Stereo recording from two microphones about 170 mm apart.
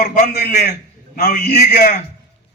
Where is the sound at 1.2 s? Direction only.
60° left (ahead or behind).